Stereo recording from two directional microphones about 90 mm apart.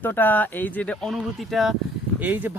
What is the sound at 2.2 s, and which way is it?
Speech, 20° right (ahead or behind).